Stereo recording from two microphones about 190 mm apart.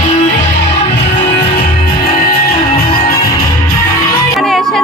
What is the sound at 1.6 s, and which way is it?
Music, 55° left (ahead or behind).